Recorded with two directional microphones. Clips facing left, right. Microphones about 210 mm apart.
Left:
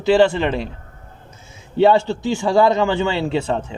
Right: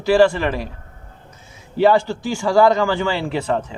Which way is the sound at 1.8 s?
25° left (ahead or behind).